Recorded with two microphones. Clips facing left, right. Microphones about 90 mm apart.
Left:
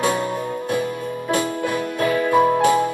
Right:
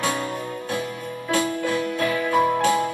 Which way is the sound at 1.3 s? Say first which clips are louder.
Left 1 dB; 15° left (ahead or behind).